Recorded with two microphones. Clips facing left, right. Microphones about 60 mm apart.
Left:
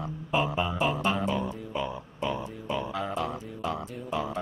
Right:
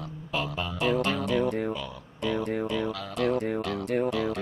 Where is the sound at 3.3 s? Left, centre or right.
Right.